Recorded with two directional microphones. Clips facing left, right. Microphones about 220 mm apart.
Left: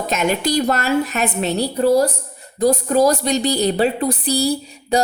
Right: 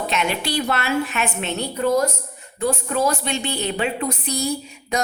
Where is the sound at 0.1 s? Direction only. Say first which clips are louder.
Left 8 dB; 45° left (ahead or behind).